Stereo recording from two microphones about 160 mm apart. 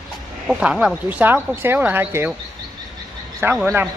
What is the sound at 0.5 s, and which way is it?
Speech, 5° right (ahead or behind).